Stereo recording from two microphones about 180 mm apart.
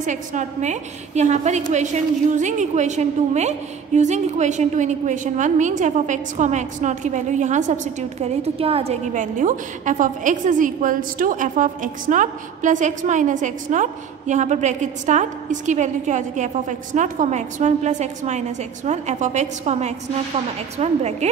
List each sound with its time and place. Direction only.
0.0 s a woman's voice: 45° right (ahead or behind)